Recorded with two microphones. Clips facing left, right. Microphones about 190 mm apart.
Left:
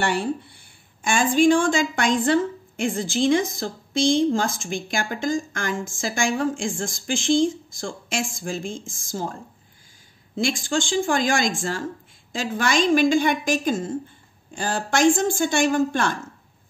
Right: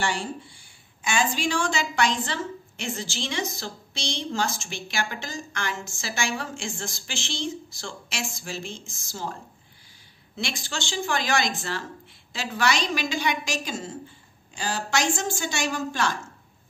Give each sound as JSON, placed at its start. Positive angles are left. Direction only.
{"t": 0.0, "sound": "a woman's voice", "side_deg": 60}